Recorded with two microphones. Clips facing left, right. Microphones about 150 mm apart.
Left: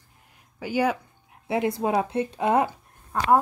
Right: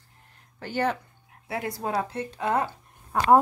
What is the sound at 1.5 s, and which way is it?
A woman's voice, 20° left (ahead or behind).